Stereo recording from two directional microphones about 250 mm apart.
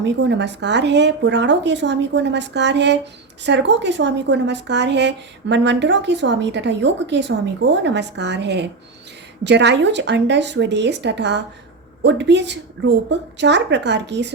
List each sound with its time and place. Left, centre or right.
0.0 s speech: right